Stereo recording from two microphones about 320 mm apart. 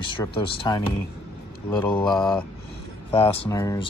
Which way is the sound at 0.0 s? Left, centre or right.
Centre.